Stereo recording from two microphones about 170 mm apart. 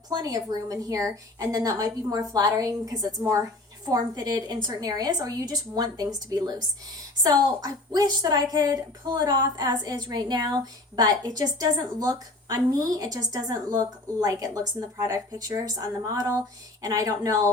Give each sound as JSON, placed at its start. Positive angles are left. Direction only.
{"t": 0.1, "sound": "a woman's voice", "side_deg": -20}